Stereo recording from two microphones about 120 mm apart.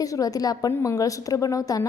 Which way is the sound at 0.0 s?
30° left (ahead or behind).